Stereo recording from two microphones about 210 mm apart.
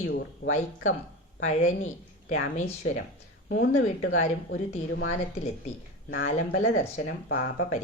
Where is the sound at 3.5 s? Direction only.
70° left (ahead or behind).